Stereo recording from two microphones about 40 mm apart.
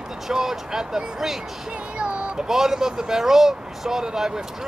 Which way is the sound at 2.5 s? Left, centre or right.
Centre.